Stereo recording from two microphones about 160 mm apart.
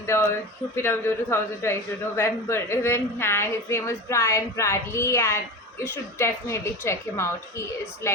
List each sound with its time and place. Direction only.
0.0 s a man's voice: 15° left (ahead or behind)